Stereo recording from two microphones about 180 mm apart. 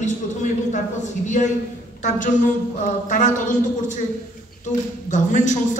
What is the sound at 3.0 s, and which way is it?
Speech, 45° left (ahead or behind).